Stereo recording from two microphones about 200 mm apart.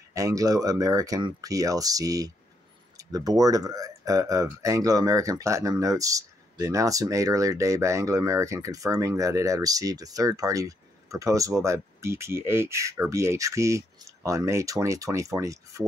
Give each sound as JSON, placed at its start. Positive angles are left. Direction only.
{"t": 0.1, "sound": "speech", "side_deg": -15}